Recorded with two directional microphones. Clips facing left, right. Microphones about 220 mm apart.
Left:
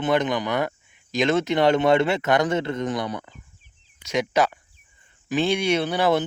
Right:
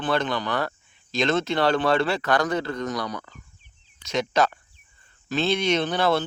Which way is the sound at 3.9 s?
10° left (ahead or behind).